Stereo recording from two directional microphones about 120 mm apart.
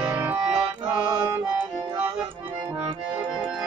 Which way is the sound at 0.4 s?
5° right (ahead or behind).